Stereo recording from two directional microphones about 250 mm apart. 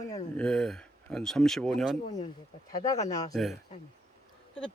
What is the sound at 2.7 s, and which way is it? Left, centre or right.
Speech, centre.